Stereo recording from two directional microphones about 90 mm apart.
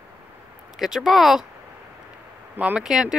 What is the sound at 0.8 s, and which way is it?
Speech, 5° right (ahead or behind).